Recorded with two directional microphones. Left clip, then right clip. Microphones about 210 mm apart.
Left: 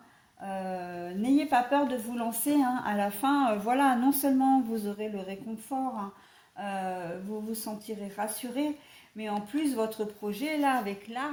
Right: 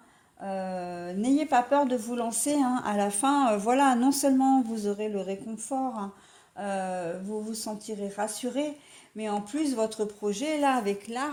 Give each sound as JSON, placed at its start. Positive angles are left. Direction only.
{"t": 0.4, "sound": "a woman's voice", "side_deg": -45}